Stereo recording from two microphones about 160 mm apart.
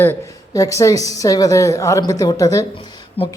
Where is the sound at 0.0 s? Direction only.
15° left (ahead or behind).